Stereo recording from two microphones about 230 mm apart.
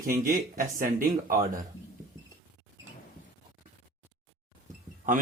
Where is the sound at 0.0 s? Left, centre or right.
Right.